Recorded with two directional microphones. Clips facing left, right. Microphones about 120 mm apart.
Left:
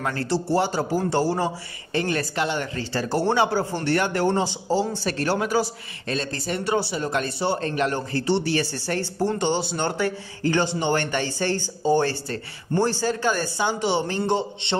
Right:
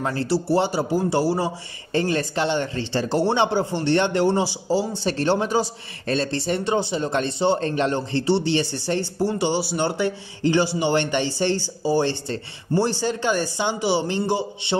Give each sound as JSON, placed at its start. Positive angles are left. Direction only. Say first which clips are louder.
{"t": 0.0, "sound": "speech", "louder": "right 2 dB", "side_deg": -25}
{"t": 0.3, "sound": "speech", "louder": "right 2 dB", "side_deg": -15}
{"t": 1.9, "sound": "speech", "louder": "right 3 dB", "side_deg": -30}
{"t": 5.0, "sound": "speech", "louder": "right 3 dB", "side_deg": -25}
{"t": 6.0, "sound": "speech", "louder": "right 5 dB", "side_deg": -35}
{"t": 12.7, "sound": "speech", "louder": "right 1 dB", "side_deg": -5}
{"t": 13.0, "sound": "speech", "louder": "right 1 dB", "side_deg": -20}